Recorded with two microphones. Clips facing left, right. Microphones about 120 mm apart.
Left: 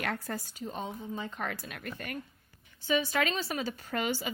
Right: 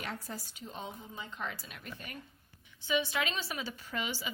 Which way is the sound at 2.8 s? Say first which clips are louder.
Left 4 dB; 40° left (ahead or behind).